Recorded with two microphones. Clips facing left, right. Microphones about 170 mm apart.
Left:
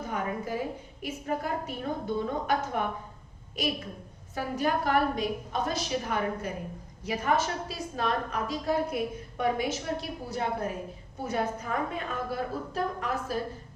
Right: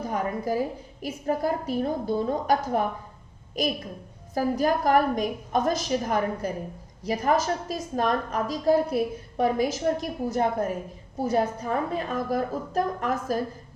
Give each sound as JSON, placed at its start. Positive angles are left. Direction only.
{"t": 0.0, "sound": "a woman's voice", "side_deg": -35}
{"t": 4.4, "sound": "a woman's voice", "side_deg": -40}